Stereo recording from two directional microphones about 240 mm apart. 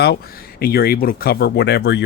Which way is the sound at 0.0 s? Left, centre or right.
Left.